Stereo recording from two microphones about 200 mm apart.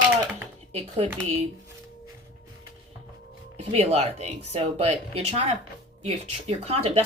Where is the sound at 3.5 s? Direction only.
30° right (ahead or behind).